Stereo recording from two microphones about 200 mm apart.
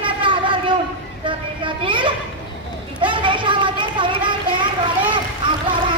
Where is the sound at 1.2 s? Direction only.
25° right (ahead or behind).